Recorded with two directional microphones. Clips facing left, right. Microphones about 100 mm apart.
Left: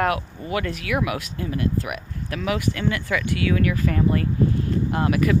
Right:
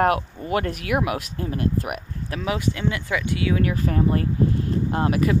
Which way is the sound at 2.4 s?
25° right (ahead or behind).